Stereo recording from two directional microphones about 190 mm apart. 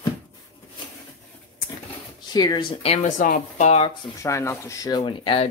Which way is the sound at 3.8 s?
20° left (ahead or behind).